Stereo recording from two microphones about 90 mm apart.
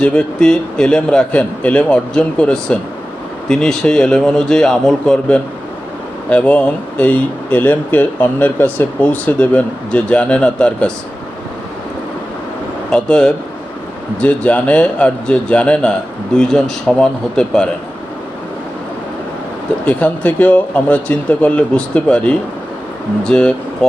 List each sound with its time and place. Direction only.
0.0 s speech: 10° left (ahead or behind)
12.9 s speech: 10° left (ahead or behind)
19.8 s speech: 20° left (ahead or behind)